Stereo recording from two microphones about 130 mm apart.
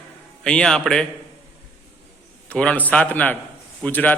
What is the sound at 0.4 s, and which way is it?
Speech, 5° left (ahead or behind).